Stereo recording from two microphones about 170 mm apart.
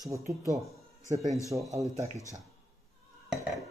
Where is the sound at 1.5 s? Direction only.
20° right (ahead or behind).